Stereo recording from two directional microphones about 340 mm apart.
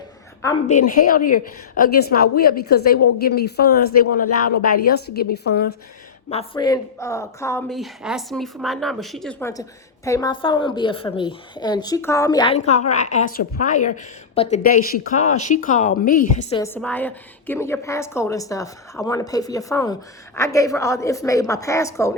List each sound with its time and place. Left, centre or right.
0.7 s a woman's voice: left
6.3 s a woman's voice: centre
16.6 s a woman's voice: centre